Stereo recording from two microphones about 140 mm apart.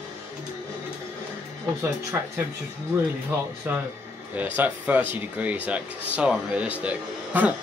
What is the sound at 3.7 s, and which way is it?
Speech, 10° right (ahead or behind).